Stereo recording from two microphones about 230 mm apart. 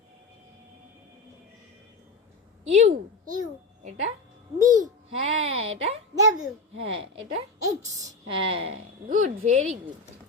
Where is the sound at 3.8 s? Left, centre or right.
Right.